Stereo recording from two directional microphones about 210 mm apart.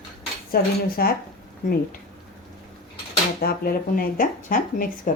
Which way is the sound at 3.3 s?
45° left (ahead or behind).